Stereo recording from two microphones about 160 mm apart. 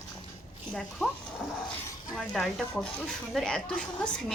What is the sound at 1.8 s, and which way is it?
Speech, 5° left (ahead or behind).